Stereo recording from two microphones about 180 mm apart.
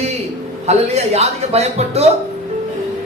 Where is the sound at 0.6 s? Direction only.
35° right (ahead or behind).